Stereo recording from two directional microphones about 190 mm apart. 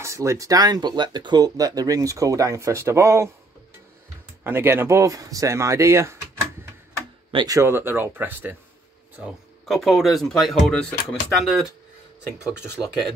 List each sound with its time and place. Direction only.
0.0 s speech: 15° right (ahead or behind)
4.5 s speech: 10° right (ahead or behind)
7.2 s speech: 20° right (ahead or behind); by 11.7 s centre (ahead or behind)
12.6 s speech: 10° left (ahead or behind)